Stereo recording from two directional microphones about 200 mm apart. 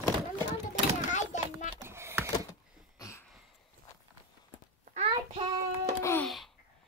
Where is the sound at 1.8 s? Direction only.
15° right (ahead or behind).